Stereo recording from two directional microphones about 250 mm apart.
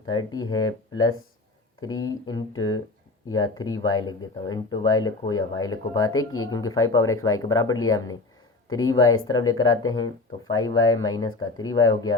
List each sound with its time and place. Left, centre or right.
0.1 s speech: centre